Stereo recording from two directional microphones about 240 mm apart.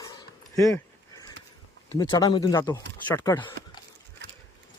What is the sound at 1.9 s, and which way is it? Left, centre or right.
Speech, centre.